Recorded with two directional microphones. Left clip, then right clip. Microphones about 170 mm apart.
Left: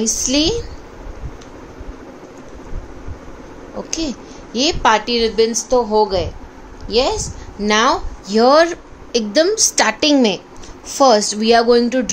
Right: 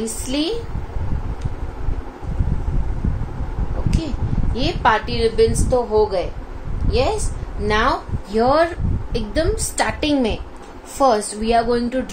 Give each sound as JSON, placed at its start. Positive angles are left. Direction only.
{"t": 0.3, "sound": "a woman's voice", "side_deg": 65}
{"t": 4.6, "sound": "a woman's voice", "side_deg": 60}
{"t": 7.6, "sound": "a woman's voice", "side_deg": 60}